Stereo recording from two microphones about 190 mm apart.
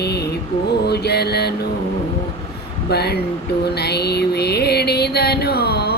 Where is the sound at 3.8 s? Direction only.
60° left (ahead or behind).